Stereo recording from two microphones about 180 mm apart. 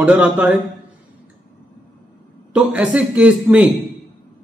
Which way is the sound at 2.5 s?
5° right (ahead or behind).